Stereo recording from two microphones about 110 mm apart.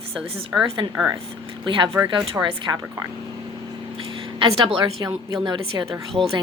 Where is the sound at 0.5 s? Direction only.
20° right (ahead or behind).